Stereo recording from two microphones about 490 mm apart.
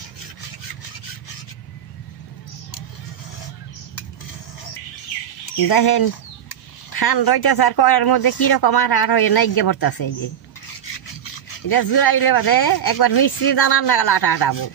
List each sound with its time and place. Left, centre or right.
5.7 s speech: left
11.7 s speech: left